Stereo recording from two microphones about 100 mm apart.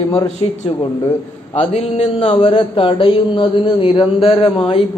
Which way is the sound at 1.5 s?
90° left.